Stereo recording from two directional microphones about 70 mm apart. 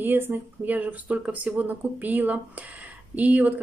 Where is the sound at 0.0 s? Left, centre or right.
Right.